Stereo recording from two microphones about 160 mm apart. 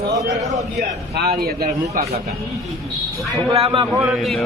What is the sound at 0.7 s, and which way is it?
Speech, 85° right.